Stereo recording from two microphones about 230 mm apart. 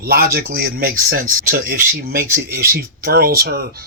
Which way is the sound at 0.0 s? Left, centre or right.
Right.